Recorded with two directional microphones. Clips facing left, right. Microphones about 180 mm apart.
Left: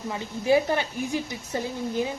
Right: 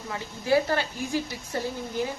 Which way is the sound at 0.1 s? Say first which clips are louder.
Left 2 dB; 15° left (ahead or behind).